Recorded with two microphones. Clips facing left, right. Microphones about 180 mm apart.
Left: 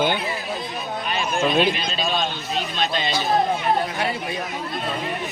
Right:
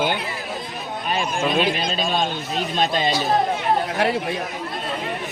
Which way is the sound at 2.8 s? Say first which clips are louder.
Right 5 dB; 45° right (ahead or behind).